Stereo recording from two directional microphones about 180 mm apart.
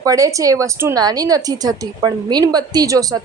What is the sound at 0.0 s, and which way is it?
A woman's voice, 20° right (ahead or behind).